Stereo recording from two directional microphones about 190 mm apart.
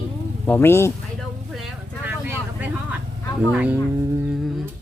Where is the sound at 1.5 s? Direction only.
Centre (ahead or behind).